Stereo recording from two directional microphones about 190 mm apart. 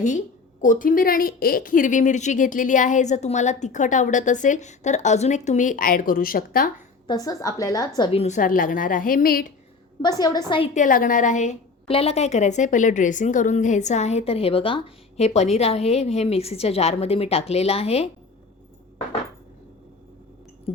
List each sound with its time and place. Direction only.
0.6 s a woman's voice: 45° left (ahead or behind)
7.1 s a woman's voice: 20° left (ahead or behind); by 9.5 s 50° left (ahead or behind)
10.0 s a woman's voice: 20° left (ahead or behind)
10.8 s a woman's voice: 45° left (ahead or behind)